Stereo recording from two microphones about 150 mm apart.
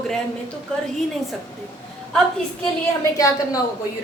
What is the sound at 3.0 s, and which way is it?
Speech, 20° left (ahead or behind).